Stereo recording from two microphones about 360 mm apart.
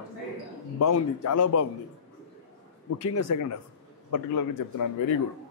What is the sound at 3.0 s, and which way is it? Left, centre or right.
Speech, left.